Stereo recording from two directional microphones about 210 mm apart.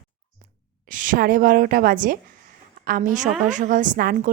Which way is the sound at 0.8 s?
40° right (ahead or behind).